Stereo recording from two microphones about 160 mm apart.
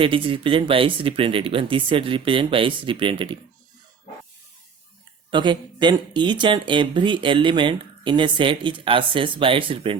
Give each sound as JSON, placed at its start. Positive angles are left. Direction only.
{"t": 0.0, "sound": "speech", "side_deg": -35}
{"t": 5.3, "sound": "speech", "side_deg": -30}